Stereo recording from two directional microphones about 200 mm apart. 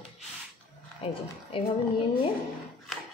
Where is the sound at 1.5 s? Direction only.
25° left (ahead or behind).